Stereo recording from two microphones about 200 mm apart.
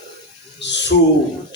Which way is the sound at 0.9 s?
55° left (ahead or behind).